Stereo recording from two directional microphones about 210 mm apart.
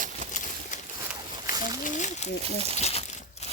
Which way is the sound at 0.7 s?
35° left (ahead or behind).